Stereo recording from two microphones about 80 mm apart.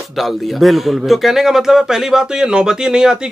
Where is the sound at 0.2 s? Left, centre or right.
Centre.